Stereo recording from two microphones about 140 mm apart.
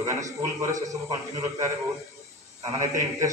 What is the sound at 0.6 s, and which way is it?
Speech, 25° right (ahead or behind).